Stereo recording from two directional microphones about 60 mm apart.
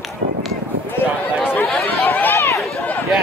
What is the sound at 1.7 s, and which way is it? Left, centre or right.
Chatter, centre.